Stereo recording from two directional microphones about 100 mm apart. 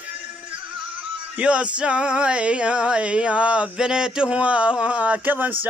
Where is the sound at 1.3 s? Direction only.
10° right (ahead or behind).